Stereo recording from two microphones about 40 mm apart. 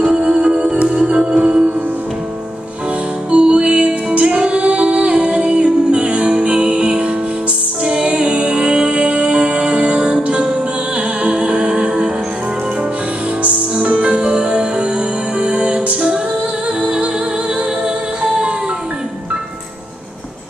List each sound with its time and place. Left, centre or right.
0.0 s music: centre
3.3 s music: right
13.4 s music: right
18.2 s music: centre